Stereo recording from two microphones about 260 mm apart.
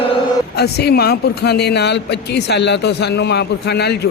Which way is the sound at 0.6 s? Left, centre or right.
Left.